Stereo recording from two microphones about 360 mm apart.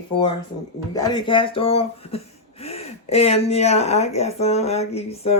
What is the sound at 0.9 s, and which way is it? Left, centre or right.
Speech, centre.